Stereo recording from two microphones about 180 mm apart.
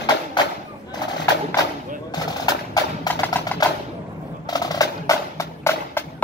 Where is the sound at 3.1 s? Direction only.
10° left (ahead or behind).